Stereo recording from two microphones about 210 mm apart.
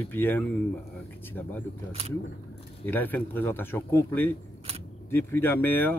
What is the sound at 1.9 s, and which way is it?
Speech, 30° right (ahead or behind).